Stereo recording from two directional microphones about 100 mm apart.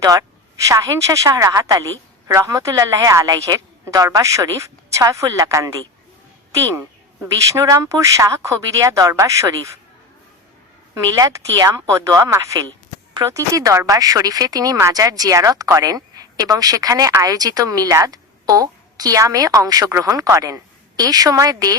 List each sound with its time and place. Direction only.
0.0 s a woman's voice: 35° right (ahead or behind)
6.7 s speech: 30° right (ahead or behind)
10.9 s speech: 35° right (ahead or behind)